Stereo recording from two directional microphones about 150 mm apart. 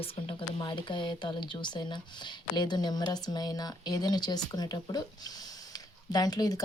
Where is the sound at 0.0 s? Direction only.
35° left (ahead or behind).